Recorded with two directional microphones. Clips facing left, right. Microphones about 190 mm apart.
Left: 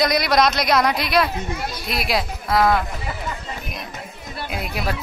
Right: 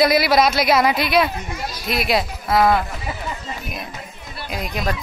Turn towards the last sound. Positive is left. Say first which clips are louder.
# right 1 dB
turn(degrees=5)  # may be behind; listen again after turning